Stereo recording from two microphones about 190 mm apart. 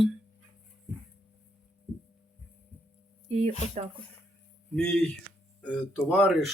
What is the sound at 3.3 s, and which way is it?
Speech, 35° right (ahead or behind).